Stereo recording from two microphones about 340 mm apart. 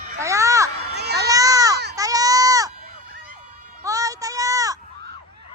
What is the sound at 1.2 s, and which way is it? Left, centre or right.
Baby cry, centre.